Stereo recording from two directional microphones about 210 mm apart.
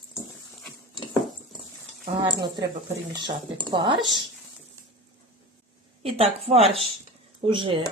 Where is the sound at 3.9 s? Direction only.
Centre (ahead or behind).